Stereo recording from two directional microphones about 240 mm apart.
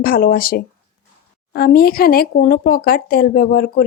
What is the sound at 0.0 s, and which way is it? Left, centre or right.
Speech, left.